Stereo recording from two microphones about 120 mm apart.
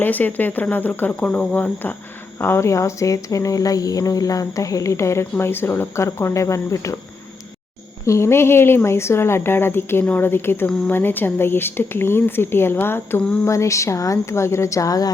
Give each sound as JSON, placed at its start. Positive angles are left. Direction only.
{"t": 0.0, "sound": "speech", "side_deg": 15}
{"t": 8.0, "sound": "speech", "side_deg": 25}